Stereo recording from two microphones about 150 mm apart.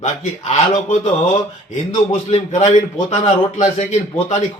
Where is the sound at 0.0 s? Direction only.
50° left (ahead or behind).